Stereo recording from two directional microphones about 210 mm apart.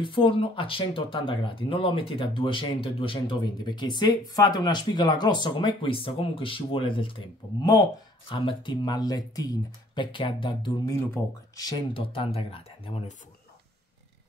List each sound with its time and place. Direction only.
0.0 s speech: 25° left (ahead or behind)
11.2 s speech: 10° left (ahead or behind); by 13.1 s 30° left (ahead or behind)